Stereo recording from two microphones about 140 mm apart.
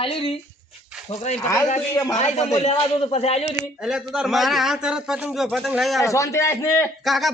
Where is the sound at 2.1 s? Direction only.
50° left (ahead or behind).